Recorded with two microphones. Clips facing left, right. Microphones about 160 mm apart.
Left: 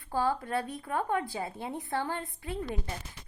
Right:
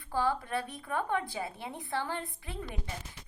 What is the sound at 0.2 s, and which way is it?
Speech, 40° left (ahead or behind).